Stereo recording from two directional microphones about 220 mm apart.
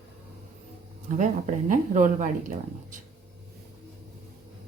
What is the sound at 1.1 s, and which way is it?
Speech, 35° right (ahead or behind).